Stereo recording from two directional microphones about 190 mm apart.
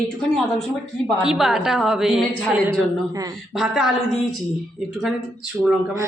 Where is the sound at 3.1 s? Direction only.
20° right (ahead or behind).